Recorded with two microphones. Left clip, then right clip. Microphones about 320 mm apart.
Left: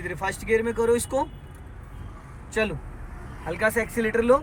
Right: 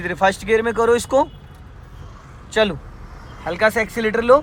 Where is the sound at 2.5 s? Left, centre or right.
Centre.